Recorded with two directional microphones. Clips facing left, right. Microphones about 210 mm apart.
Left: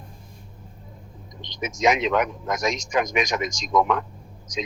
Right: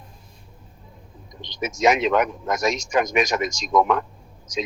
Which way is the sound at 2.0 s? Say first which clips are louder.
Right 2 dB; 50° right (ahead or behind).